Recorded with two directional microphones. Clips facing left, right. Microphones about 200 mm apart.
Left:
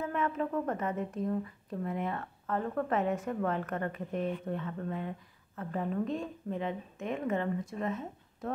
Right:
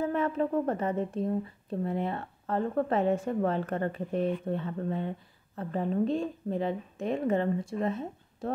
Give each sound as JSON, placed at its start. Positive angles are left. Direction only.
{"t": 0.0, "sound": "speech", "side_deg": -35}